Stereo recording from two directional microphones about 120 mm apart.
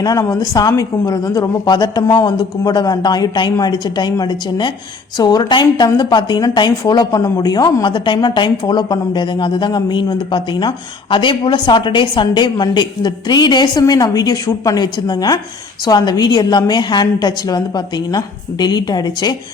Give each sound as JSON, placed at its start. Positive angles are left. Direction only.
{"t": 0.0, "sound": "a woman's voice", "side_deg": 30}